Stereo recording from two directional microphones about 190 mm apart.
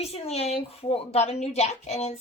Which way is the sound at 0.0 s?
35° left (ahead or behind).